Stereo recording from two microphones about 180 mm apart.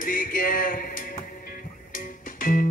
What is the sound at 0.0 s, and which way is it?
Music, 50° left (ahead or behind).